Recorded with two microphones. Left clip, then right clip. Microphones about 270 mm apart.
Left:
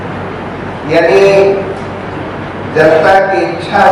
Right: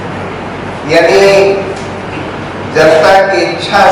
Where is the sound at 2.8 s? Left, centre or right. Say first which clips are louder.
Right 1 dB; centre.